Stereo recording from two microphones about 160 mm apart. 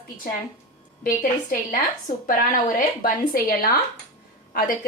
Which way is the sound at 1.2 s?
55° left (ahead or behind).